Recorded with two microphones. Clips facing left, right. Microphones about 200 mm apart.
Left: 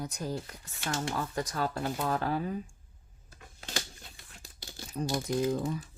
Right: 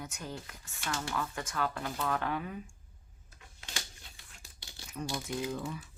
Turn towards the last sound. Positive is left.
turn(degrees=40)  # may be behind; listen again after turning